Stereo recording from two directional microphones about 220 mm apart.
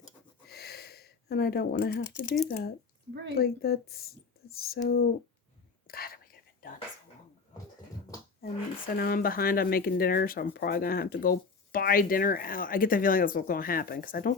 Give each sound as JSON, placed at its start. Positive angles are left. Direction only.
{"t": 0.4, "sound": "a sound", "side_deg": 45}
{"t": 2.2, "sound": "speech", "side_deg": 0}
{"t": 2.5, "sound": "a woman's voice", "side_deg": 45}
{"t": 5.9, "sound": "whispering", "side_deg": 40}
{"t": 8.4, "sound": "speech", "side_deg": 45}